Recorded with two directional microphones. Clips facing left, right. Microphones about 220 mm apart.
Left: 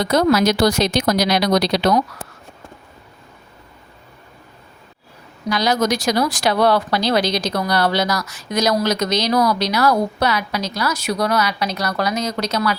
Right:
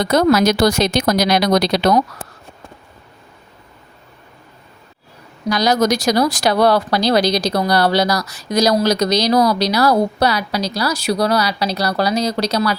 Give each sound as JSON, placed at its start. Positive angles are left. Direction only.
{"t": 0.1, "sound": "speech", "side_deg": -45}
{"t": 5.5, "sound": "speech", "side_deg": -40}